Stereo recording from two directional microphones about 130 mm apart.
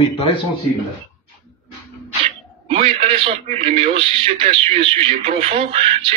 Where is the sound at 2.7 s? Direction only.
45° right (ahead or behind).